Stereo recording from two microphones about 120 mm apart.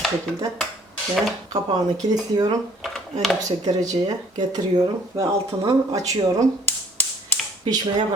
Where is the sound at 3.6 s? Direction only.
30° right (ahead or behind).